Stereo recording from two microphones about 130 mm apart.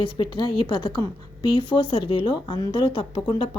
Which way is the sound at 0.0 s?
40° left (ahead or behind).